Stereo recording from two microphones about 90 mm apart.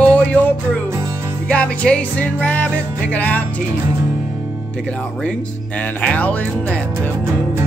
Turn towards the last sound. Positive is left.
turn(degrees=15)  # may be behind; listen again after turning